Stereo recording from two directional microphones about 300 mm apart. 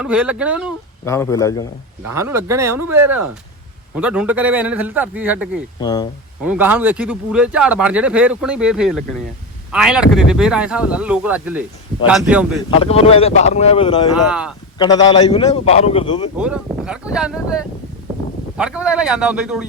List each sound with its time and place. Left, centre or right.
0.0 s speech: centre
1.0 s a man's voice: centre
2.0 s speech: centre
5.8 s a man's voice: centre
6.4 s speech: centre
12.8 s speech: centre
14.3 s speech: centre
14.8 s a man's voice: centre
16.4 s speech: centre